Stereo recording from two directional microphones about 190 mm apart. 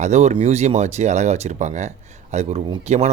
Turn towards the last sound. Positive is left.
turn(degrees=-35)  # may be behind; listen again after turning